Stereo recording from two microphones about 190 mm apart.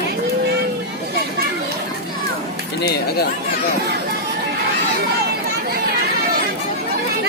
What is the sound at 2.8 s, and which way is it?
Speech, 60° left (ahead or behind).